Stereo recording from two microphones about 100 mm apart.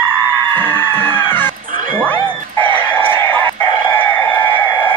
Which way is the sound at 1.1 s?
20° left (ahead or behind).